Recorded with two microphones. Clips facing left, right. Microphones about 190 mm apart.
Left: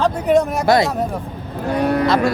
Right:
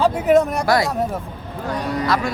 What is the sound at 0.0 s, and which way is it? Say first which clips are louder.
Speech: even; 5° right (ahead or behind).